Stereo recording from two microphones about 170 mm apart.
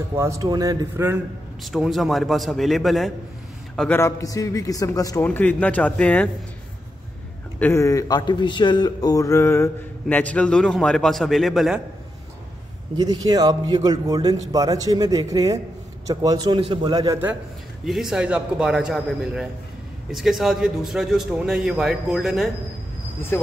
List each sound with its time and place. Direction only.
0.1 s a man's voice: 15° right (ahead or behind)
1.6 s a man's voice: centre (ahead or behind)
4.0 s a man's voice: 20° left (ahead or behind)
7.5 s a man's voice: 10° left (ahead or behind)
12.9 s a man's voice: 25° right (ahead or behind)
17.8 s a man's voice: centre (ahead or behind)
23.3 s speech: 15° left (ahead or behind)